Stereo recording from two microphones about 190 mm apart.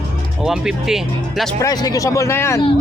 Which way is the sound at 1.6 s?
20° left (ahead or behind).